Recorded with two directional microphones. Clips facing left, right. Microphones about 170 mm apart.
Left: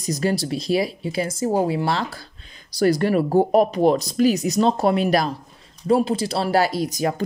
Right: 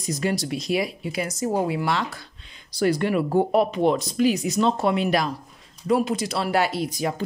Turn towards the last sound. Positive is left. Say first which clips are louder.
# left 3 dB
turn(degrees=40)  # may be behind; listen again after turning